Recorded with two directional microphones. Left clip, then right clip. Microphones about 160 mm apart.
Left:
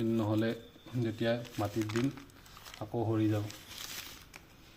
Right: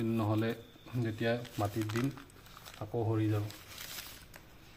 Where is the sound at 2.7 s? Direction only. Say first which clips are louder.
Left 1 dB; centre (ahead or behind).